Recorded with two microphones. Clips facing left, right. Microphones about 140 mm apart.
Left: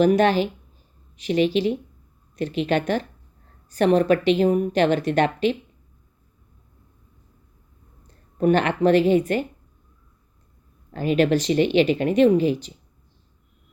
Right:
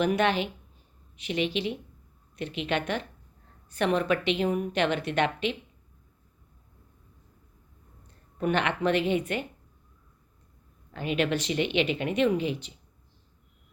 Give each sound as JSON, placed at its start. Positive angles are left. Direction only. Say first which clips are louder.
{"t": 0.0, "sound": "a woman's voice", "louder": "left 7 dB", "side_deg": 40}
{"t": 8.0, "sound": "speech", "louder": "left 9 dB", "side_deg": 35}
{"t": 10.9, "sound": "a woman's voice", "louder": "left 8 dB", "side_deg": 35}